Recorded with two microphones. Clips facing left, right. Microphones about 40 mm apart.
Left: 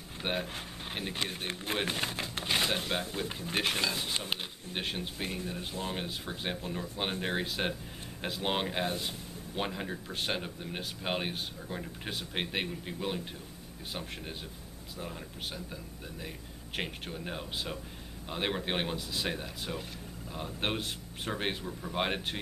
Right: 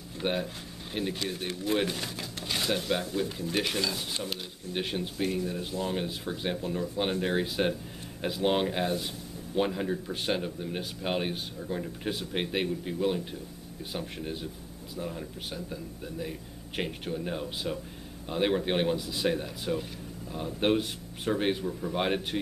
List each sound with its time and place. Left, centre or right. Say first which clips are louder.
0.2 s speech: right 4 dB; centre
1.1 s speech: right 2 dB; left
2.9 s speech: right 4 dB; centre
3.3 s speech: right 2 dB; left
4.7 s speech: right 4 dB; centre
5.2 s speech: right 8 dB; centre